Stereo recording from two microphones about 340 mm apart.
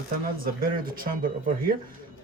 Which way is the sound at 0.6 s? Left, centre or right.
Right.